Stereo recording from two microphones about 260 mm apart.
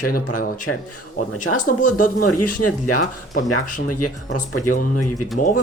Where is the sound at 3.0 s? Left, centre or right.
Left.